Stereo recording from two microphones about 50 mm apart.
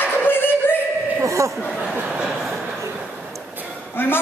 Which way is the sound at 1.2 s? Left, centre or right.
Right.